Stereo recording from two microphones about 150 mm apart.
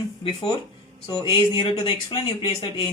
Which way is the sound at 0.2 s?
30° left (ahead or behind).